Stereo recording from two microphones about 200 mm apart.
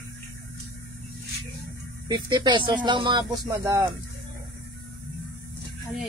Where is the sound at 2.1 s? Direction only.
20° right (ahead or behind).